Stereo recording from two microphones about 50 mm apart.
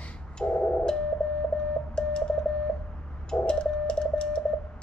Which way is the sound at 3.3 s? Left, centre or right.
Centre.